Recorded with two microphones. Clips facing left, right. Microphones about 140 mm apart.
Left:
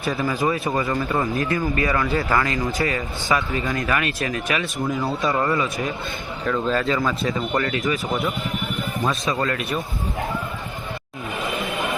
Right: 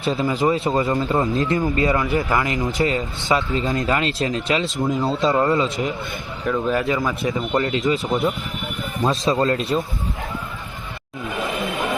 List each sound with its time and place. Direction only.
0.0 s speech: 25° right (ahead or behind)
6.5 s a man's voice: 15° right (ahead or behind)
9.0 s speech: 25° right (ahead or behind)